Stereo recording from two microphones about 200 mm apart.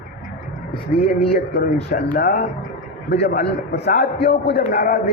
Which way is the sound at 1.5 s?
50° left (ahead or behind).